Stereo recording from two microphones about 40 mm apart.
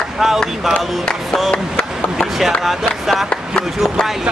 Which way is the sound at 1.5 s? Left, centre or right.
Left.